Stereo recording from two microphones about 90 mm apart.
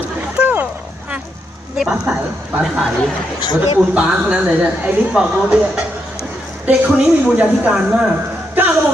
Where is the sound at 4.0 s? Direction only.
10° right (ahead or behind).